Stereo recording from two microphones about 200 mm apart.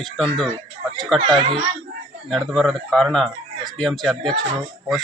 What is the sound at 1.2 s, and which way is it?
Speech, 25° right (ahead or behind).